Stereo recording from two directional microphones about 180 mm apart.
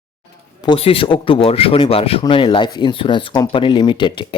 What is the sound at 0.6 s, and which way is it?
Speech, 30° left (ahead or behind).